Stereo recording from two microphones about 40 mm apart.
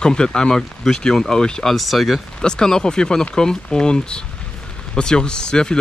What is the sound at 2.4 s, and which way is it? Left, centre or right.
Speech, centre.